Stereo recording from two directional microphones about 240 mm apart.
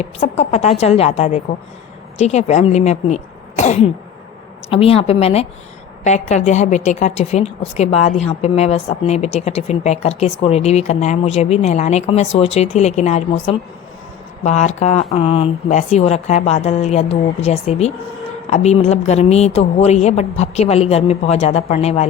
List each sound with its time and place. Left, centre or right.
0.0 s a woman's voice: left
3.6 s sneeze: left
4.7 s a woman's voice: left